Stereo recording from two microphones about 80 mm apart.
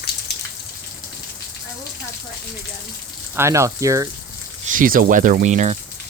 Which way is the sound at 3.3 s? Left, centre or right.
Right.